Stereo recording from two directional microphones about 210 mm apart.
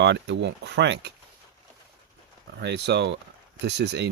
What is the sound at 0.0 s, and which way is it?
Speech, 55° right (ahead or behind).